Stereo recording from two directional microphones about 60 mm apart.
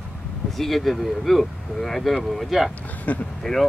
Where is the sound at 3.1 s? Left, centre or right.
Left.